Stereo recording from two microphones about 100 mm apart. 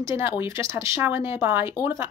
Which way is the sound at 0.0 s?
25° right (ahead or behind).